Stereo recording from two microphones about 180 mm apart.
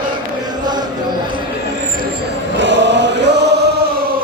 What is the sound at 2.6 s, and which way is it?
Choir, 90° right.